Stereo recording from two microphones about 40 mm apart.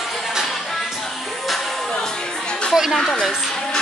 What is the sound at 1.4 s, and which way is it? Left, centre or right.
Music, centre.